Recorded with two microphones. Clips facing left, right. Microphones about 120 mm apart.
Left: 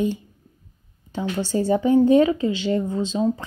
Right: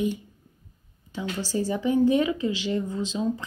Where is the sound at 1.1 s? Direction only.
25° left (ahead or behind).